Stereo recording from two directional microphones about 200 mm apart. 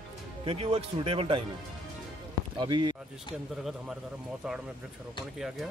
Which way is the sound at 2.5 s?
20° right (ahead or behind).